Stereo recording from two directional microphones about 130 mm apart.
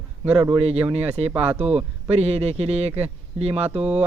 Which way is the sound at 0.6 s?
50° right (ahead or behind).